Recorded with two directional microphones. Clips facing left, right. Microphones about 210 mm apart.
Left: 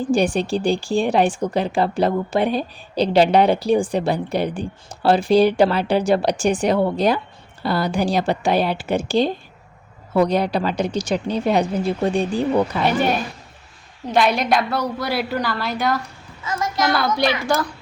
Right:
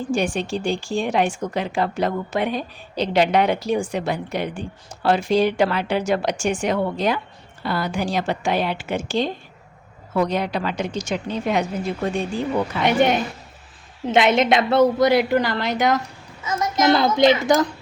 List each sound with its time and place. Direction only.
0.1 s speech: 35° left (ahead or behind)
12.8 s a woman's voice: 20° right (ahead or behind)